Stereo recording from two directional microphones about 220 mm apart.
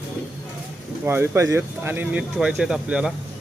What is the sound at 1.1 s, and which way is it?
Speech, 10° right (ahead or behind).